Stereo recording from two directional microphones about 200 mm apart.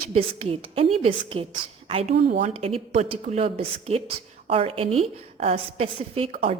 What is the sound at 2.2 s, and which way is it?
Speech, 40° right (ahead or behind).